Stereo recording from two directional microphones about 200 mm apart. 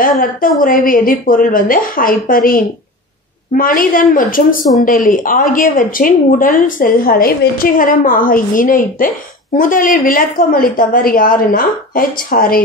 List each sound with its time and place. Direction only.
0.0 s speech: 45° left (ahead or behind)